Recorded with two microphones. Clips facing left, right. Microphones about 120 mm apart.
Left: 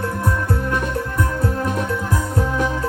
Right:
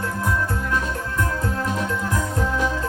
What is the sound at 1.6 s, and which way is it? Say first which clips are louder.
Music: left 2 dB; 55° left (ahead or behind).